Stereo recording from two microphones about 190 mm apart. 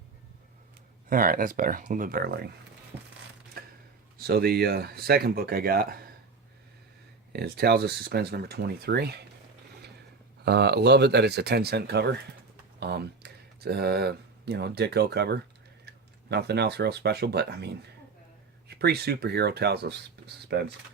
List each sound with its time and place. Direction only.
1.1 s speech: 45° right (ahead or behind)
3.6 s a sound: 50° right (ahead or behind)
4.2 s speech: 55° right (ahead or behind)
7.3 s speech: 55° right (ahead or behind)
10.4 s speech: 60° right (ahead or behind)